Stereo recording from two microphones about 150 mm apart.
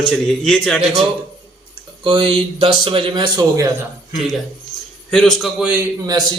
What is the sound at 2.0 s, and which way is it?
A man's voice, 35° right (ahead or behind).